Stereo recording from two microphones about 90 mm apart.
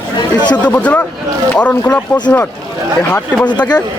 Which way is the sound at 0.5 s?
15° left (ahead or behind).